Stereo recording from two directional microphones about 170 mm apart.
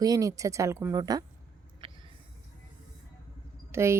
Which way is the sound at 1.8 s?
30° right (ahead or behind).